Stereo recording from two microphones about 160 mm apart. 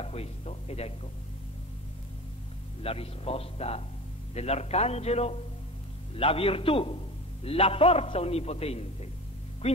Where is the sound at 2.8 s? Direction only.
35° left (ahead or behind).